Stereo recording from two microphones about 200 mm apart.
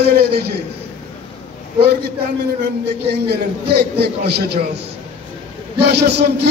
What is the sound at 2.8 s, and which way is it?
A man's voice, 55° right (ahead or behind).